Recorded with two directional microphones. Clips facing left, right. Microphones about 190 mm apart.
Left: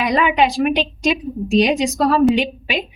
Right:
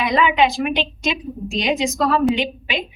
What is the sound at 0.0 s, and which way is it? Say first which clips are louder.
A woman's voice: left 1 dB; 40° left (ahead or behind).